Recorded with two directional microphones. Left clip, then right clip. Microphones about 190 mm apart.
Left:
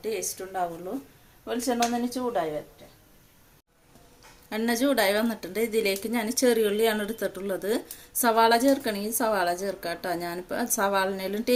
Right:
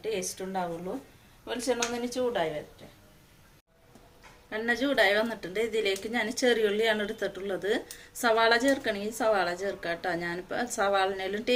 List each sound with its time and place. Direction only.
0.0 s a woman's voice: 55° left (ahead or behind); by 2.4 s 40° left (ahead or behind)
4.4 s a woman's voice: 60° left (ahead or behind)